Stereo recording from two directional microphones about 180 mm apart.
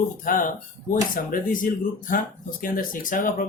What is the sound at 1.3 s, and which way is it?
Speech, 50° left (ahead or behind).